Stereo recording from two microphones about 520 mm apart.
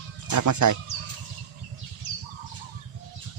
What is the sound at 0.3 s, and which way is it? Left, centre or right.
Speech, right.